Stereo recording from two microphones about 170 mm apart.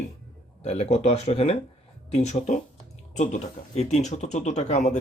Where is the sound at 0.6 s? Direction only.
40° left (ahead or behind).